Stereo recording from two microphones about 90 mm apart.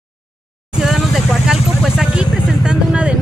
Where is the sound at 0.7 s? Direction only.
5° right (ahead or behind).